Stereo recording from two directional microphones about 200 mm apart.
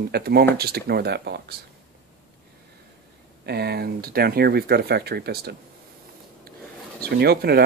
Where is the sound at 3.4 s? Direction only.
55° right (ahead or behind).